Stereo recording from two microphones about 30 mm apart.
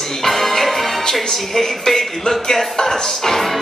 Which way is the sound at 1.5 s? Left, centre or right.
Centre.